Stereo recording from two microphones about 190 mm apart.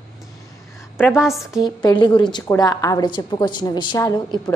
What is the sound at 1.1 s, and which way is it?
Speech, centre (ahead or behind).